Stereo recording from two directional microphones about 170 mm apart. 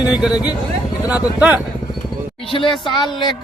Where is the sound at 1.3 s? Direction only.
10° right (ahead or behind).